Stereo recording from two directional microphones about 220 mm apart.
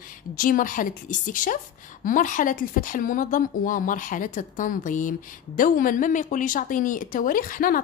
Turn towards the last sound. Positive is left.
turn(degrees=40)  # may be behind; listen again after turning